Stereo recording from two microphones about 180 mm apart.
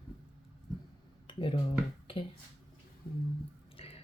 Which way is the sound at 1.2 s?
30° left (ahead or behind).